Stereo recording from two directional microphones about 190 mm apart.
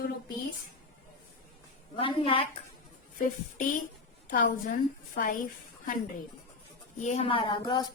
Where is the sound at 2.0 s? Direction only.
30° left (ahead or behind).